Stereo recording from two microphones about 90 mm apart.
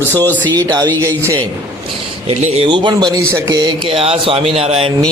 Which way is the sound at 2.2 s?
80° right.